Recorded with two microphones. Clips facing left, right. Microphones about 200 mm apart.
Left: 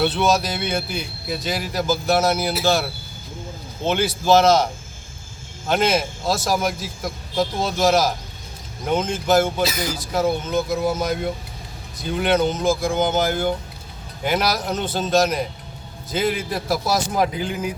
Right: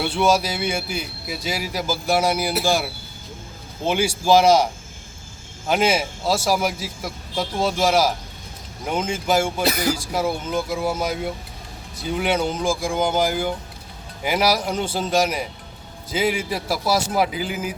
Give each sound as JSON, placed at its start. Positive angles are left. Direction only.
{"t": 0.0, "sound": "speech", "side_deg": -10}
{"t": 9.6, "sound": "speech", "side_deg": -65}
{"t": 9.9, "sound": "speech", "side_deg": -10}